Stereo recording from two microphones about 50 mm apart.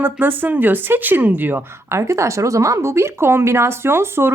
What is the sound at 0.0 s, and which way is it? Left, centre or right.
Speech, right.